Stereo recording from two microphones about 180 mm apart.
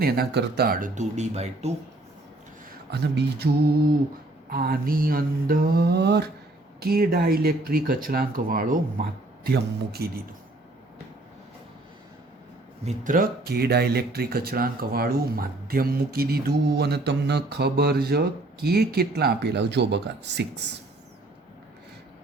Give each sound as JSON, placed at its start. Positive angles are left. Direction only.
{"t": 0.0, "sound": "speech", "side_deg": -60}
{"t": 2.9, "sound": "speech", "side_deg": -60}
{"t": 12.8, "sound": "speech", "side_deg": -50}